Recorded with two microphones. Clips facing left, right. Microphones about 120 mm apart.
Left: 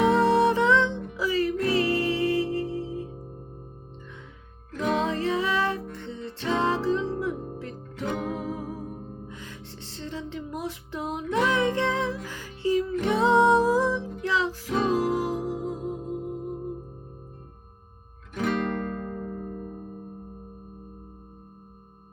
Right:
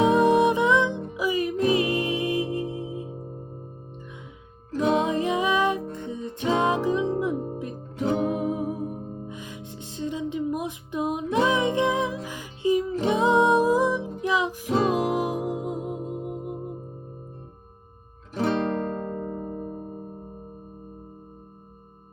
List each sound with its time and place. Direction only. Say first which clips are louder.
0.0 s music: right 2 dB; 15° right (ahead or behind)
4.7 s music: right 4 dB; 25° right (ahead or behind)
18.3 s guitar: right 3 dB; 30° right (ahead or behind)